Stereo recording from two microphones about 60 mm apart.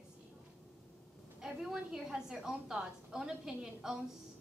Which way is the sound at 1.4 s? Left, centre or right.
Centre.